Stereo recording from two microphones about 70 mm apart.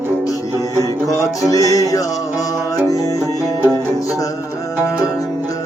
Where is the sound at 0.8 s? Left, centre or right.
Left.